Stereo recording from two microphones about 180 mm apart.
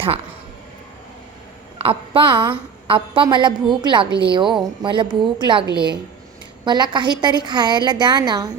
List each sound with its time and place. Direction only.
1.8 s a woman's voice: 30° right (ahead or behind)